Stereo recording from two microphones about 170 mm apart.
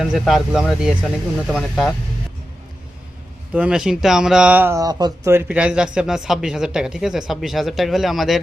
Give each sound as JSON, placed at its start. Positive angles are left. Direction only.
{"t": 0.0, "sound": "speech", "side_deg": 0}
{"t": 3.5, "sound": "speech", "side_deg": -5}